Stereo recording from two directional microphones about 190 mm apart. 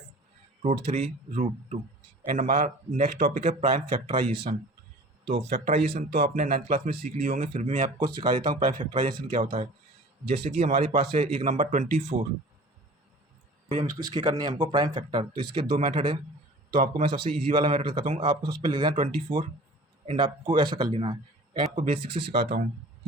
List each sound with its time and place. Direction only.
0.6 s speech: 35° right (ahead or behind)
2.3 s speech: 45° right (ahead or behind)
3.4 s speech: 30° right (ahead or behind)
5.2 s speech: 60° right (ahead or behind); by 7.9 s 40° right (ahead or behind)
7.9 s speech: 25° right (ahead or behind)
10.7 s speech: 50° right (ahead or behind)
11.0 s speech: 30° right (ahead or behind)
13.7 s speech: 25° right (ahead or behind)
22.4 s speech: 55° right (ahead or behind)